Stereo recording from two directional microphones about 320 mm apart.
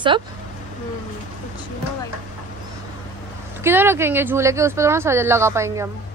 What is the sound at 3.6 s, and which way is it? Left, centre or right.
Speech, centre.